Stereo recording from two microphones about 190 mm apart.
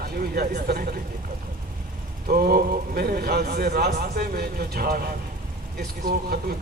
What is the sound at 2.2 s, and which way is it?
Speech, 50° right (ahead or behind).